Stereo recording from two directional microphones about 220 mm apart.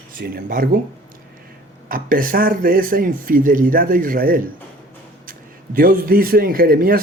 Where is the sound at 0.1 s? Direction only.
40° right (ahead or behind).